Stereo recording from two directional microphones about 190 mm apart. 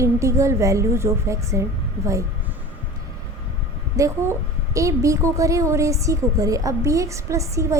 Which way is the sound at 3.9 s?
15° right (ahead or behind).